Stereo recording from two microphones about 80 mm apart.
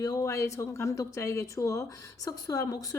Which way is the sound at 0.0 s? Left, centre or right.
Left.